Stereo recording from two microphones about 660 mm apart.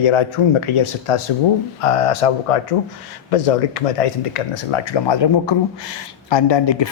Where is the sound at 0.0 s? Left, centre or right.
Left.